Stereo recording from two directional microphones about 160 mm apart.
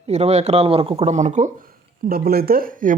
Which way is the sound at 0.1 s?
45° right (ahead or behind).